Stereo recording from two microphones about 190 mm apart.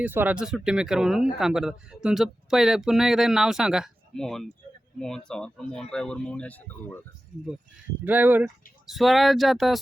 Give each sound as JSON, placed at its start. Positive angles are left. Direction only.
{"t": 0.0, "sound": "speech", "side_deg": -10}
{"t": 7.3, "sound": "speech", "side_deg": -40}
{"t": 8.0, "sound": "speech", "side_deg": -10}